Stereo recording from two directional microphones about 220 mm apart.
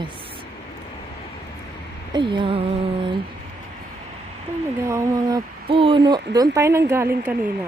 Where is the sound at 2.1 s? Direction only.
20° right (ahead or behind).